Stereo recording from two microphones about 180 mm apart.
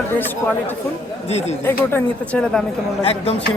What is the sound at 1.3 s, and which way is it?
Speech, 35° left (ahead or behind).